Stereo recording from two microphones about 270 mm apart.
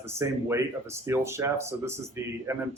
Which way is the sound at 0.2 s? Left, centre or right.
Centre.